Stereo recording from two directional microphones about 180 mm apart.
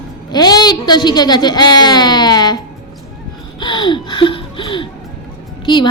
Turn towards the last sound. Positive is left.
turn(degrees=25)  # may be behind; listen again after turning